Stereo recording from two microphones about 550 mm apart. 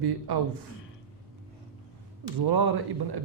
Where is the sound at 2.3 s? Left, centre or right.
Right.